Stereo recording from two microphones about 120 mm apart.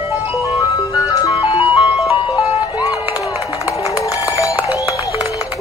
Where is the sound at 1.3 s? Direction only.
55° left (ahead or behind).